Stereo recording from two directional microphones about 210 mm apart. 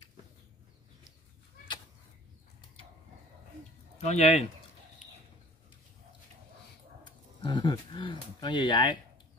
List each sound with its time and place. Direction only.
4.0 s speech: 30° left (ahead or behind)
7.1 s speech: 20° left (ahead or behind)